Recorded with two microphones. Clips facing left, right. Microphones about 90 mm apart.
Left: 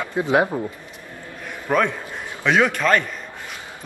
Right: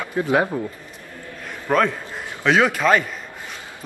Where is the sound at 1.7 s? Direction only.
Centre (ahead or behind).